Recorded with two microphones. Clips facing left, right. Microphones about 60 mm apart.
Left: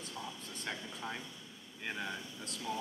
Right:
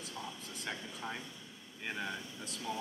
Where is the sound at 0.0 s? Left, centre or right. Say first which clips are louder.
Even; centre.